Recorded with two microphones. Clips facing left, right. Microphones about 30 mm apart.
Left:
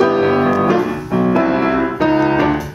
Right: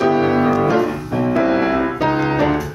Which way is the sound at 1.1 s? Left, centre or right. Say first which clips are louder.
Left 4 dB; left.